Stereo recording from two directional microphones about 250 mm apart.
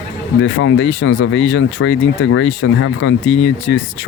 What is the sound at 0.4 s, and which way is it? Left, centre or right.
Speech, left.